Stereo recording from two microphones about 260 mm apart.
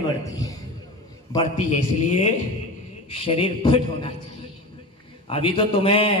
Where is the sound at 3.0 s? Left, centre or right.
Left.